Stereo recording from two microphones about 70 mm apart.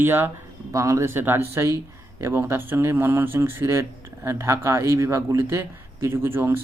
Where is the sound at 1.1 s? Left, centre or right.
Right.